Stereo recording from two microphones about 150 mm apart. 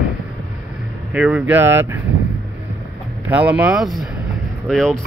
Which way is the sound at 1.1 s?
10° right (ahead or behind).